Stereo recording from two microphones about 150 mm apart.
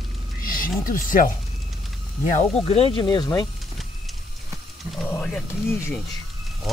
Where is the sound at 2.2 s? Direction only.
50° left (ahead or behind); by 3.4 s 25° left (ahead or behind).